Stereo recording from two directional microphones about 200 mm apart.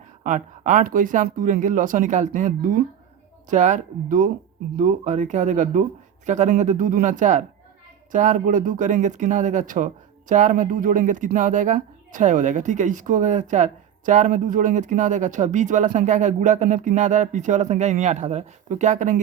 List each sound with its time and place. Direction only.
0.2 s speech: 40° right (ahead or behind)